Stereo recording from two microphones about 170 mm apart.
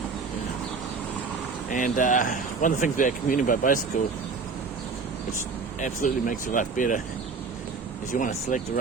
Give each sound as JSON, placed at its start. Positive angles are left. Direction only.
{"t": 1.7, "sound": "speech", "side_deg": 50}
{"t": 5.8, "sound": "speech", "side_deg": 55}
{"t": 8.1, "sound": "speech", "side_deg": 50}